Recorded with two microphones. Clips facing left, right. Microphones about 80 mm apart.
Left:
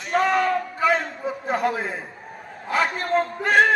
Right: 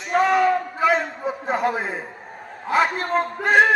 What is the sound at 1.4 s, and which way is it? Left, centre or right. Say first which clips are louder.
Speech: right 1 dB; right.